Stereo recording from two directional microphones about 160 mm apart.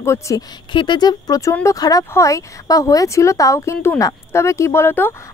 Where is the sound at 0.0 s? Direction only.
15° left (ahead or behind).